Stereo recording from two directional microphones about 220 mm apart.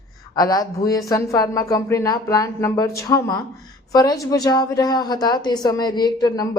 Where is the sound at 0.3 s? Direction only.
15° left (ahead or behind).